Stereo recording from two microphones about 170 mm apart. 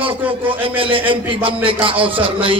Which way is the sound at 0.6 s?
30° right (ahead or behind).